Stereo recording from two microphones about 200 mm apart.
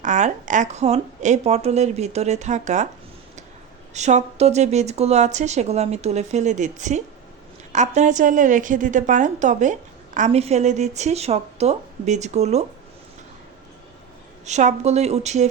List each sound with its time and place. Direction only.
0.0 s speech: 40° right (ahead or behind)
3.9 s speech: 35° right (ahead or behind)
14.4 s speech: 35° right (ahead or behind)